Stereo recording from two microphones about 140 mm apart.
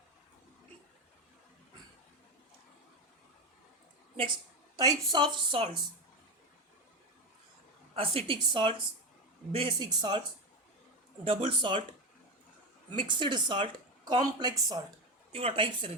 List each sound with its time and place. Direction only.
4.8 s speech: 30° right (ahead or behind)
7.9 s speech: 40° right (ahead or behind)
9.7 s speech: 30° right (ahead or behind)
11.4 s speech: 35° right (ahead or behind)
12.9 s a woman's voice: 35° right (ahead or behind)
15.3 s speech: 40° right (ahead or behind)